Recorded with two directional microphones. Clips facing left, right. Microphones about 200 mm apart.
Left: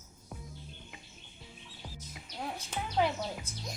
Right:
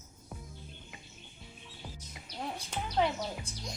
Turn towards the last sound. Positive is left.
turn(degrees=5)  # may be behind; listen again after turning